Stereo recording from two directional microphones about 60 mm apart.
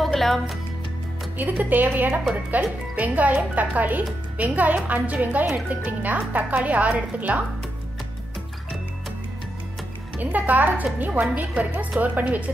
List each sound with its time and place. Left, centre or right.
0.0 s speech: centre
1.4 s a woman's voice: right
10.1 s a woman's voice: right